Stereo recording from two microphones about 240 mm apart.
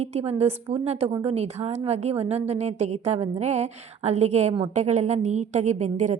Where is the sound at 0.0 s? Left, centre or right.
Right.